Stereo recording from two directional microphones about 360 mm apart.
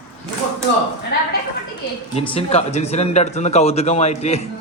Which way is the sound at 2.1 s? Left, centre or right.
Centre.